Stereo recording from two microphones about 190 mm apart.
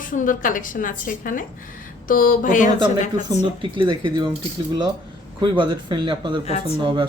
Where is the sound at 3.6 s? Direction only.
25° right (ahead or behind).